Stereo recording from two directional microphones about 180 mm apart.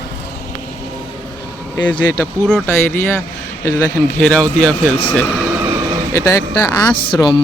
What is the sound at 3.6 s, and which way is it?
A man's voice, 15° left (ahead or behind).